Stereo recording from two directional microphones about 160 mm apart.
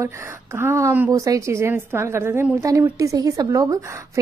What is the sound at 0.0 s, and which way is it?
A woman's voice, 15° right (ahead or behind).